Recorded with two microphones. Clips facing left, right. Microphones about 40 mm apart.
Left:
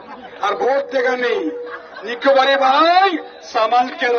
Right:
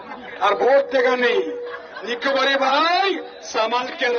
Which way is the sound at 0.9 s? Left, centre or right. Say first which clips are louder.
Even; centre.